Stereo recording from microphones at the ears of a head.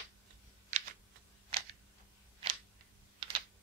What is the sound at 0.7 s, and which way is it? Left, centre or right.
Typing, right.